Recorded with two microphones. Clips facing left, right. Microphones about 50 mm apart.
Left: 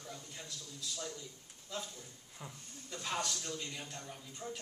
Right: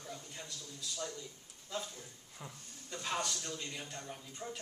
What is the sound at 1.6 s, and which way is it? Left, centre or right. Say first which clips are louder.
A man's voice: right 2 dB; centre.